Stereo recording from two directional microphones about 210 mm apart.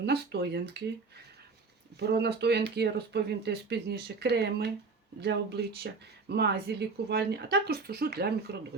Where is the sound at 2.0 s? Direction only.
50° right (ahead or behind).